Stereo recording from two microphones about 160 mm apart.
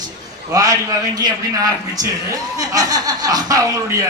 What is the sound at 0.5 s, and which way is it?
Speech, 20° right (ahead or behind).